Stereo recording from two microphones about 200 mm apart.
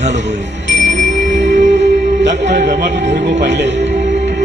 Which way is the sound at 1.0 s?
35° right (ahead or behind).